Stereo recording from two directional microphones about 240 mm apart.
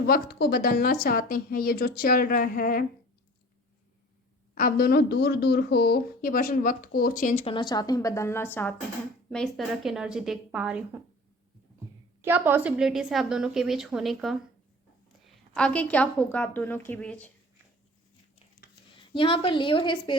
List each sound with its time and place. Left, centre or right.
0.1 s speech: left
4.5 s speech: left; by 8.4 s centre
9.3 s a woman's voice: centre
12.2 s a woman's voice: centre
15.5 s a woman's voice: centre
18.9 s a woman's voice: left